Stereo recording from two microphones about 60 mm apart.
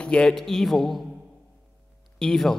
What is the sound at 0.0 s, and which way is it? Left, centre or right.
Speech, centre.